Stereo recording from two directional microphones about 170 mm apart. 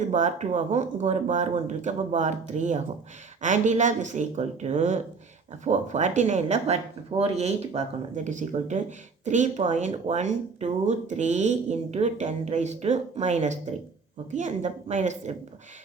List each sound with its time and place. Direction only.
0.1 s speech: 45° right (ahead or behind)